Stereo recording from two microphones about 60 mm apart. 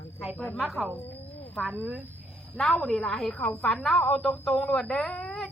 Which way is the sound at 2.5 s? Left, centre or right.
Centre.